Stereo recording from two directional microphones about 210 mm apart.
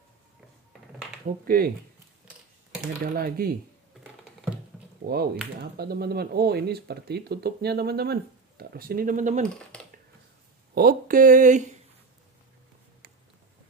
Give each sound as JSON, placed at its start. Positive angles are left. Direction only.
{"t": 1.2, "sound": "speech", "side_deg": -45}
{"t": 3.0, "sound": "speech", "side_deg": -45}
{"t": 5.0, "sound": "speech", "side_deg": -50}
{"t": 10.7, "sound": "speech", "side_deg": -45}